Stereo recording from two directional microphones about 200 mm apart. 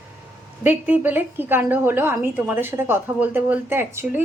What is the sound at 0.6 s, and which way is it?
A woman's voice, 10° right (ahead or behind).